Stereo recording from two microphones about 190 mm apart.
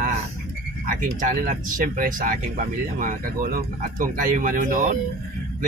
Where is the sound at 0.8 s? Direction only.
45° right (ahead or behind).